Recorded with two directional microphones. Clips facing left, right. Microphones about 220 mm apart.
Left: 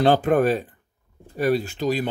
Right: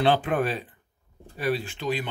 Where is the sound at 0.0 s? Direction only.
45° left (ahead or behind).